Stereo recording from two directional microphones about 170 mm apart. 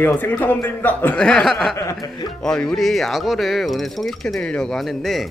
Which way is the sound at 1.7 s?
20° left (ahead or behind).